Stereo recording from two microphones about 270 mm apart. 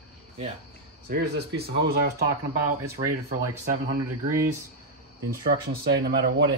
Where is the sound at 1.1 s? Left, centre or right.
Right.